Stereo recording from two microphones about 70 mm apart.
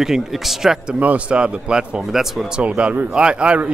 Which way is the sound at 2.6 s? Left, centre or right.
Centre.